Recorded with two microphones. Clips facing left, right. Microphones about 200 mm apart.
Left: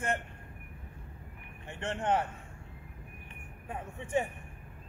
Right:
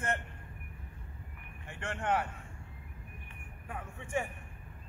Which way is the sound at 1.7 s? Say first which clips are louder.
Left 2 dB; 20° left (ahead or behind).